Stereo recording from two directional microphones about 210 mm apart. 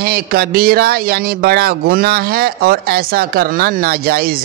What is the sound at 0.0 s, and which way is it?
Speech, 45° right (ahead or behind).